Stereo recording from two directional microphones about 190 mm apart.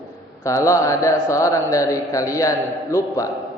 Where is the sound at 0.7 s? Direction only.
15° left (ahead or behind).